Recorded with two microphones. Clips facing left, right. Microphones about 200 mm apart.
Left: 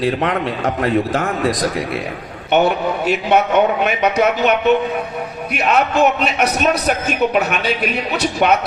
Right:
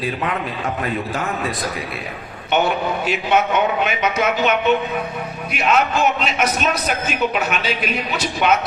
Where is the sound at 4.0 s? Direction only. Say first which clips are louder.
Left 5 dB; 40° left (ahead or behind).